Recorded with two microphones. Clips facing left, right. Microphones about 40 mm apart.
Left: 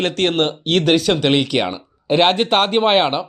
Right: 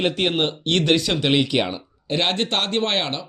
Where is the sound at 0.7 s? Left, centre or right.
Left.